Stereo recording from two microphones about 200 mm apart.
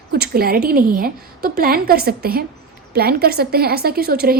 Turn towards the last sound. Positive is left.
turn(degrees=-50)  # may be behind; listen again after turning